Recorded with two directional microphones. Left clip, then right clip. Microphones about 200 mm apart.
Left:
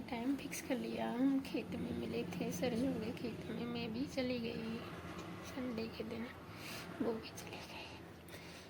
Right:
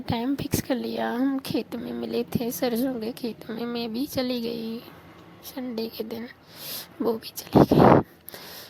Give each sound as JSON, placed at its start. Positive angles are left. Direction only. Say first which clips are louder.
{"t": 0.0, "sound": "a woman's voice", "louder": "right 13 dB", "side_deg": -45}